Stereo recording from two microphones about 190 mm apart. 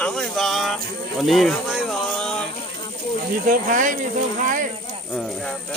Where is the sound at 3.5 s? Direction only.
45° right (ahead or behind).